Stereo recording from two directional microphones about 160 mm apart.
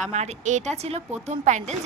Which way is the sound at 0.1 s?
45° right (ahead or behind).